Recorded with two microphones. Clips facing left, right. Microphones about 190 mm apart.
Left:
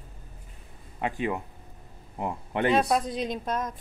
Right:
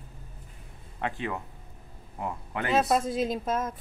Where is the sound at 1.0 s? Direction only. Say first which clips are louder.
Left 3 dB; 15° left (ahead or behind).